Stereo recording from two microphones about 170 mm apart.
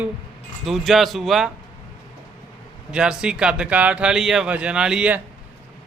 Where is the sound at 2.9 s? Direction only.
5° right (ahead or behind).